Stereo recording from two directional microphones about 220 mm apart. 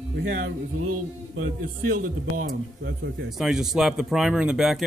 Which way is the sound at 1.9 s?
40° right (ahead or behind).